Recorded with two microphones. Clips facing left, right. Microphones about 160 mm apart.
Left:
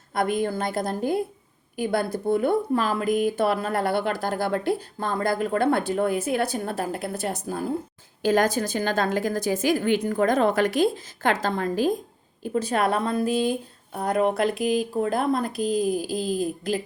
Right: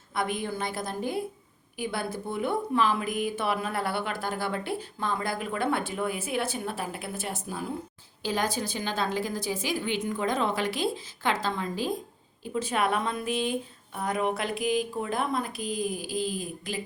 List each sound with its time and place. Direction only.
0.1 s speech: 45° left (ahead or behind)